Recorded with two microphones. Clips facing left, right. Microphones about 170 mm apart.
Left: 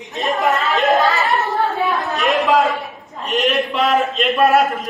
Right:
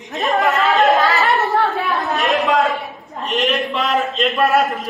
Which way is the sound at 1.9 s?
Centre (ahead or behind).